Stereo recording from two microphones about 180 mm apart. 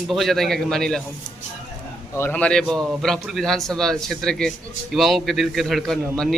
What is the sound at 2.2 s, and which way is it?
A man's voice, 10° left (ahead or behind).